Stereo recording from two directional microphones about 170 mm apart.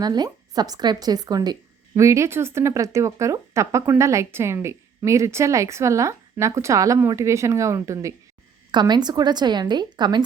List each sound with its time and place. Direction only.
0.0 s a woman's voice: 25° right (ahead or behind)